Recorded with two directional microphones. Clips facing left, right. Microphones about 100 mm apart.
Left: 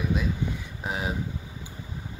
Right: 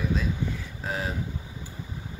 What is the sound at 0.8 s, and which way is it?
Speech, 15° left (ahead or behind).